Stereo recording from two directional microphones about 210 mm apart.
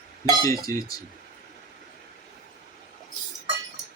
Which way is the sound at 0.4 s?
15° left (ahead or behind).